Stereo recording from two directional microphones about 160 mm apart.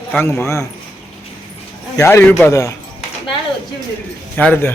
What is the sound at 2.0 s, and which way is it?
Speech, 15° left (ahead or behind).